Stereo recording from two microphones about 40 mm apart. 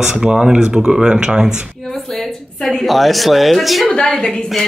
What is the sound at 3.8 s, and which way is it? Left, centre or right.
Speech, centre.